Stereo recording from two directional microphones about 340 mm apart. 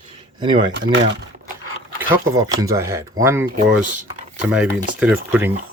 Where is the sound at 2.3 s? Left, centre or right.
Centre.